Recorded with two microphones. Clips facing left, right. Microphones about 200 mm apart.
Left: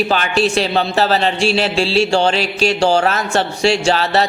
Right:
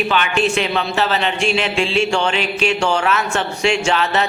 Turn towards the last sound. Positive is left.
turn(degrees=35)  # may be behind; listen again after turning